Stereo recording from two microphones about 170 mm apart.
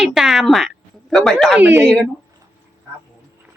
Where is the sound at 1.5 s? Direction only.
10° right (ahead or behind).